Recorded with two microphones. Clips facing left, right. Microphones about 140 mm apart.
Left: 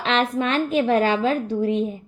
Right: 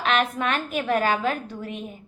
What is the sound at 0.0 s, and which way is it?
A woman's voice, 30° left (ahead or behind).